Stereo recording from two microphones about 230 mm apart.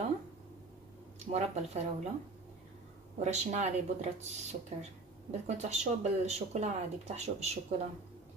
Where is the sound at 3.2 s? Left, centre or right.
Right.